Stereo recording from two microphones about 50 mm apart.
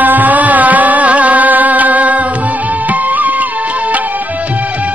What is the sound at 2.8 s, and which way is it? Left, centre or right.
Music, right.